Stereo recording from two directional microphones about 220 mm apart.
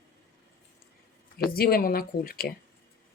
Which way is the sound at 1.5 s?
45° left (ahead or behind).